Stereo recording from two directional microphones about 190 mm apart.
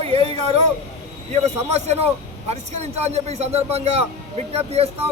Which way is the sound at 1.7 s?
35° right (ahead or behind).